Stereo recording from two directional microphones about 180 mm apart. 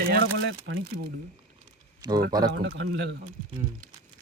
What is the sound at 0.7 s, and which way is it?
Speech, 90° right.